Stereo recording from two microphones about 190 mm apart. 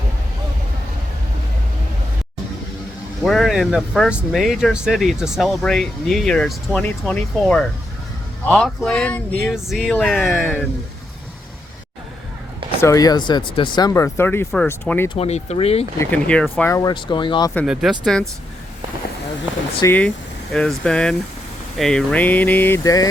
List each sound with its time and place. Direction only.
3.2 s speech: centre (ahead or behind)
12.8 s speech: 20° left (ahead or behind)
15.1 s speech: 35° left (ahead or behind)
16.0 s speech: 5° left (ahead or behind); by 17.5 s 25° left (ahead or behind)
17.7 s speech: 5° right (ahead or behind)
19.8 s speech: 10° left (ahead or behind)